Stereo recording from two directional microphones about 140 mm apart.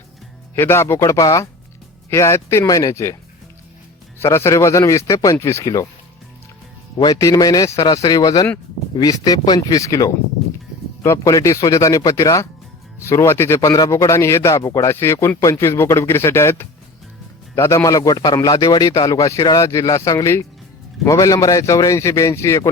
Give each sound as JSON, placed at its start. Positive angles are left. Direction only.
{"t": 0.5, "sound": "a man's voice", "side_deg": 20}
{"t": 4.2, "sound": "a man's voice", "side_deg": 20}
{"t": 7.0, "sound": "a man's voice", "side_deg": 25}